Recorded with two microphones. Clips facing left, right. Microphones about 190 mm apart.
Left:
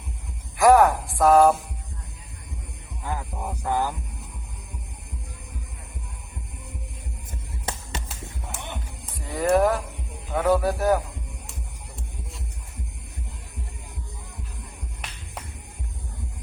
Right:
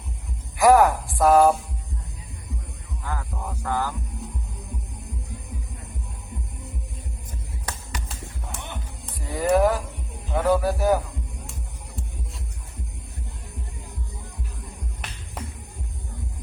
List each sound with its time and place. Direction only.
0.5 s a woman's voice: centre (ahead or behind)
3.0 s music: 15° left (ahead or behind)
7.6 s music: 25° left (ahead or behind)
8.0 s music: centre (ahead or behind)
9.1 s speech: centre (ahead or behind)